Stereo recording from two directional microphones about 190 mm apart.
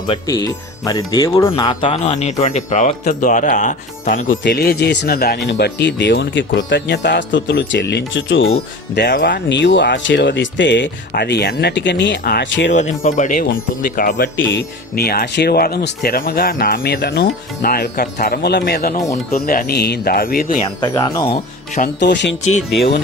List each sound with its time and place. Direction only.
0.1 s speech: 25° left (ahead or behind)
1.9 s speech: 35° left (ahead or behind)
4.3 s speech: 60° left (ahead or behind); by 8.5 s 80° left
9.0 s speech: 60° left (ahead or behind)
12.7 s speech: 40° left (ahead or behind)
14.3 s speech: 75° left (ahead or behind); by 20.7 s 45° left (ahead or behind)
20.8 s speech: 15° left (ahead or behind)
22.0 s speech: 65° left (ahead or behind)
22.8 s speech: 60° left (ahead or behind)